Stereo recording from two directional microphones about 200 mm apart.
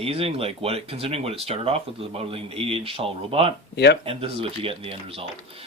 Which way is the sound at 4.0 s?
30° right (ahead or behind).